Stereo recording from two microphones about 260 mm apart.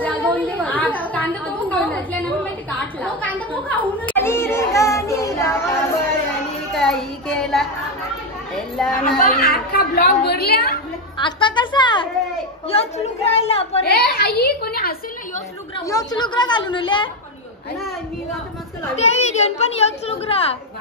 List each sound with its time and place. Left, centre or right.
0.0 s a sound: centre
3.0 s a woman's voice: centre
4.1 s music: centre
6.7 s child singing: centre
8.7 s a woman's voice: centre
9.2 s a woman's voice: left
11.1 s a woman's voice: centre
13.8 s a woman's voice: left
15.8 s a woman's voice: centre
18.9 s a woman's voice: left